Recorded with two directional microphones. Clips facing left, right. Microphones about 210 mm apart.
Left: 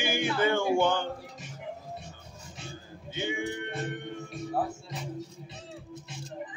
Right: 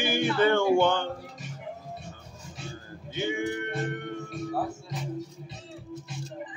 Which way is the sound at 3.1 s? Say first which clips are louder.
Right 3 dB; 15° left (ahead or behind).